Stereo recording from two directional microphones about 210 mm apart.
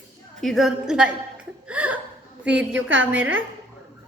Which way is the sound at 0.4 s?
Centre (ahead or behind).